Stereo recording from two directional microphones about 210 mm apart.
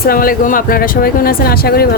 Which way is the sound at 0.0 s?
45° left (ahead or behind).